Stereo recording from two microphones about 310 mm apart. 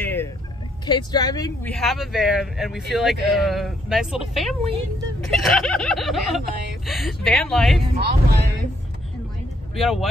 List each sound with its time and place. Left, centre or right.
0.0 s a sound: centre
0.8 s speech: centre
7.9 s speech: right
9.8 s speech: centre